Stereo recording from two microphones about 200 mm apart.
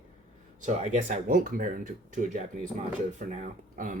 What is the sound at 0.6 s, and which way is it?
Speech, 40° right (ahead or behind).